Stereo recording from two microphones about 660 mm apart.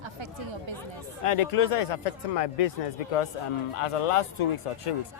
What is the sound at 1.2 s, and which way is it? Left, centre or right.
Speech, left.